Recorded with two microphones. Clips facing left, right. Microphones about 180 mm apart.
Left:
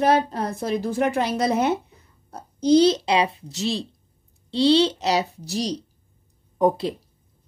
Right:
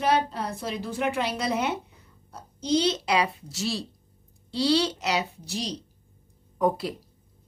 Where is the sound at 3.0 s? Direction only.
25° left (ahead or behind); by 5.7 s 40° left (ahead or behind).